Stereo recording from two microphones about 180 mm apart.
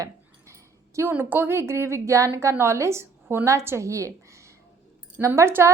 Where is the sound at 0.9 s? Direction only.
15° right (ahead or behind).